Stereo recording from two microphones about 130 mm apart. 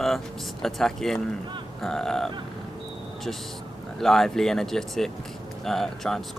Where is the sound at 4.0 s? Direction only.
Centre (ahead or behind).